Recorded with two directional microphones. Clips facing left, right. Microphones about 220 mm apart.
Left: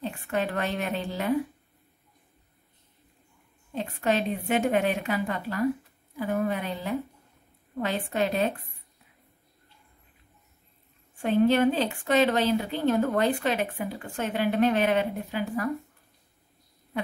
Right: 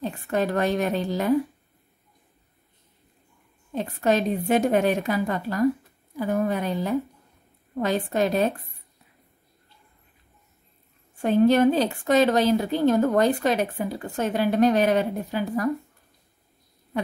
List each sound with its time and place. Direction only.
0.0 s a woman's voice: 40° right (ahead or behind)
3.7 s speech: 40° right (ahead or behind)
11.1 s speech: 40° right (ahead or behind)